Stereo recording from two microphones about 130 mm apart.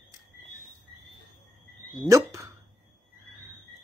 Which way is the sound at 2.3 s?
25° right (ahead or behind).